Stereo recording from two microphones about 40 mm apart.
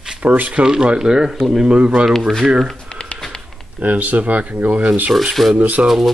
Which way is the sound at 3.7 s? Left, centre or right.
Right.